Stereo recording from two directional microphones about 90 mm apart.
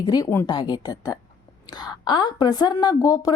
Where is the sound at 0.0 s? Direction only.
45° left (ahead or behind).